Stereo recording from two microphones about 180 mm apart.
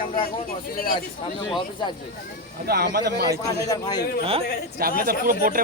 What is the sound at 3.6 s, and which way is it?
Speech, 20° left (ahead or behind).